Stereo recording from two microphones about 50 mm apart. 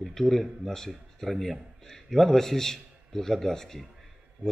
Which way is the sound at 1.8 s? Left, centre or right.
Centre.